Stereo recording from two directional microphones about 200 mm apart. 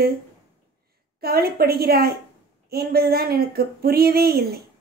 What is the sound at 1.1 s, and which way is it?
A woman's voice, 50° right (ahead or behind).